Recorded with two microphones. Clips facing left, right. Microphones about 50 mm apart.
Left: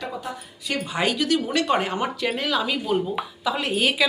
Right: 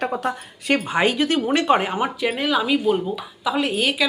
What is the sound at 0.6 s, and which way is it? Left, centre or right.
A woman's voice, right.